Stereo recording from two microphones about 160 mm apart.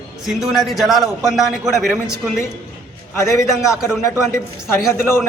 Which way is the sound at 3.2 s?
20° left (ahead or behind).